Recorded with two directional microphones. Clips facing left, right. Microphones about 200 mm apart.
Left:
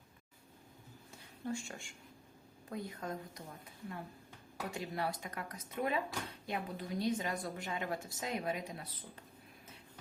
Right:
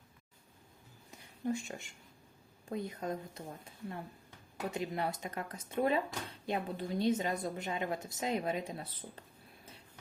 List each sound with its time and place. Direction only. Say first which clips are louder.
1.5 s a woman's voice: right 4 dB; 20° right (ahead or behind)